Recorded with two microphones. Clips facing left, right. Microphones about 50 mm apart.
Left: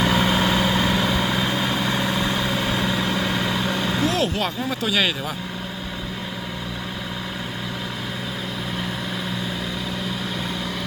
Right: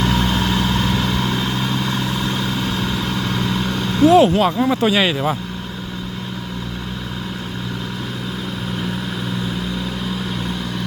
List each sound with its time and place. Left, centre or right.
0.0 s vehicle: centre
4.0 s speech: centre
4.7 s speech: right